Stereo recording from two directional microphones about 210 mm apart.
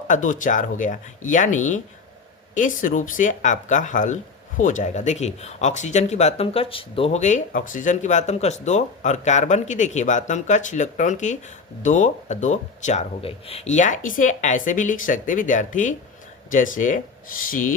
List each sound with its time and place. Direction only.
0.1 s speech: 40° left (ahead or behind)